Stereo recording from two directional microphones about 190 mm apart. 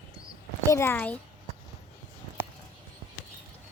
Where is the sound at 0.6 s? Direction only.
15° left (ahead or behind).